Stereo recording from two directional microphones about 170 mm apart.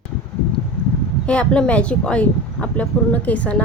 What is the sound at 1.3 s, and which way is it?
Speech, 5° left (ahead or behind).